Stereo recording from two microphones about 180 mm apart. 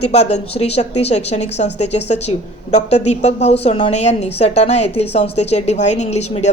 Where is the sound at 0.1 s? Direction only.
40° left (ahead or behind).